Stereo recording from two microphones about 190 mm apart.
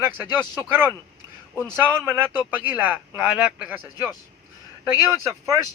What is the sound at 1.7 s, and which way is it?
Speech, 10° right (ahead or behind).